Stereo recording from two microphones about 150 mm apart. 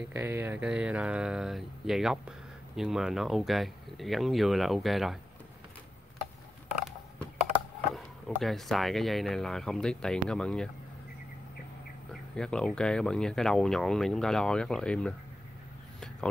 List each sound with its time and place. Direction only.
0.1 s speech: 15° right (ahead or behind)
7.9 s speech: centre (ahead or behind)
12.1 s speech: 5° left (ahead or behind)